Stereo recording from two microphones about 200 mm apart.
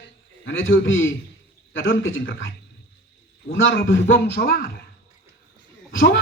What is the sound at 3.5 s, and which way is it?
A man's voice, 70° left (ahead or behind).